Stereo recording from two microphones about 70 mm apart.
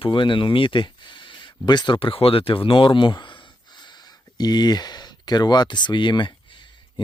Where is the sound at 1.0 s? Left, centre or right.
Left.